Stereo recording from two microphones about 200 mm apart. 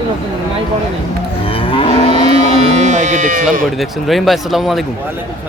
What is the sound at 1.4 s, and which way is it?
Moo, 25° left (ahead or behind).